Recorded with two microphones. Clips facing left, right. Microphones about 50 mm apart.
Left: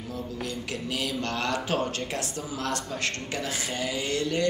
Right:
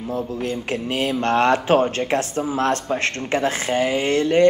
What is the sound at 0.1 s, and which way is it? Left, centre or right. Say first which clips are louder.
Speech: right 9 dB; right.